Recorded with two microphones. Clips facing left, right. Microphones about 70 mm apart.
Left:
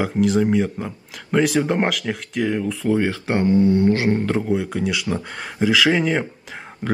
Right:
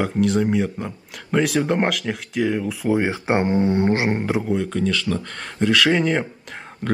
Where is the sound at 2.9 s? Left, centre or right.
Centre.